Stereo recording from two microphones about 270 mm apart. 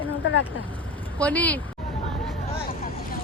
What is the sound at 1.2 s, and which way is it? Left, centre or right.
Speech, centre.